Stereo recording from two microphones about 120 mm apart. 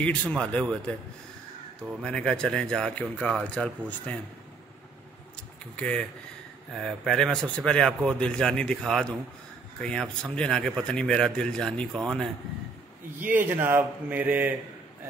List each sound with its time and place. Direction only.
0.0 s speech: 10° left (ahead or behind)
2.0 s speech: 5° left (ahead or behind)
5.8 s speech: 10° left (ahead or behind)
13.2 s speech: 15° right (ahead or behind)